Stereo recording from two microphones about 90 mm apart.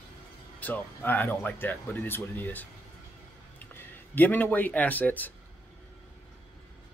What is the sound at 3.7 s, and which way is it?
Speech, 25° left (ahead or behind).